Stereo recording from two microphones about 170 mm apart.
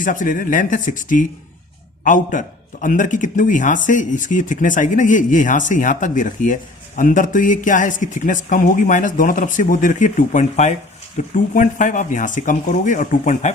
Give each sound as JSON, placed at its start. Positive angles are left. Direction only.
{"t": 0.0, "sound": "speech", "side_deg": 50}